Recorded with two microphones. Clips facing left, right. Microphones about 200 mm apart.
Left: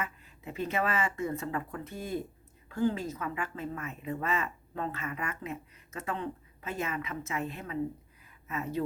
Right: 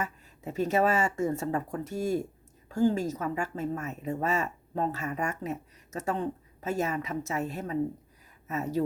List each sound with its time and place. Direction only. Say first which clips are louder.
0.0 s speech: right 4 dB; 40° right (ahead or behind)